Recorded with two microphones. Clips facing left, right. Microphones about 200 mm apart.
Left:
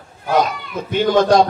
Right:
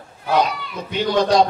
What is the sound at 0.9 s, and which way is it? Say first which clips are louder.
Speech: left 3 dB; 50° left (ahead or behind).